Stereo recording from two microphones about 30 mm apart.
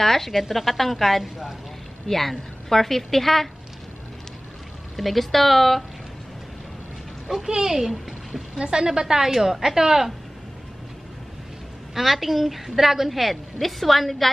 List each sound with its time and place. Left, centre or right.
0.0 s a woman's voice: centre
4.9 s a woman's voice: centre
7.4 s a woman's voice: right
7.8 s a child's voice: centre
8.5 s a woman's voice: right
9.0 s a woman's voice: centre
11.9 s a woman's voice: centre